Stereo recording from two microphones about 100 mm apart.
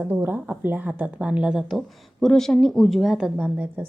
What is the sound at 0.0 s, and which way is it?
A woman's voice, 20° right (ahead or behind).